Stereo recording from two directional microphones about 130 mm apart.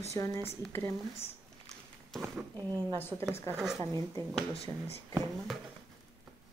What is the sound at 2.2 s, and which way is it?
Speech, 25° right (ahead or behind).